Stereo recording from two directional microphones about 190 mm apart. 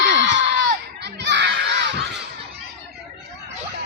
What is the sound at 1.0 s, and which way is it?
Children playing, 65° right (ahead or behind).